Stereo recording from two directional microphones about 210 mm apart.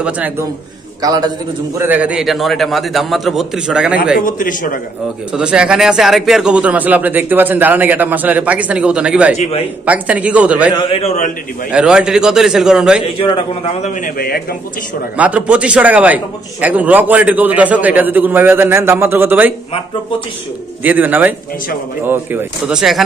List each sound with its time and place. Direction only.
0.0 s a man's voice: 10° right (ahead or behind)
1.0 s a man's voice: 20° right (ahead or behind)
1.8 s a man's voice: 10° right (ahead or behind)
4.2 s a man's voice: 40° left (ahead or behind)
5.3 s a man's voice: 5° right (ahead or behind)
9.4 s a man's voice: 30° left (ahead or behind)
9.8 s a man's voice: 5° right (ahead or behind)
10.8 s a man's voice: 30° left (ahead or behind)
11.7 s a man's voice: 5° right (ahead or behind)
13.2 s a man's voice: 25° left (ahead or behind); by 14.4 s 45° left (ahead or behind)
15.1 s a man's voice: 5° right (ahead or behind)
20.8 s a man's voice: 10° right (ahead or behind)